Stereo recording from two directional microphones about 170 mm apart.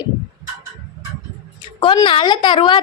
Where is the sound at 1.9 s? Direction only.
25° left (ahead or behind).